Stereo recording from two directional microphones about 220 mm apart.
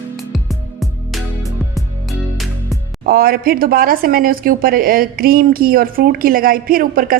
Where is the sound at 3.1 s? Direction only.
40° right (ahead or behind).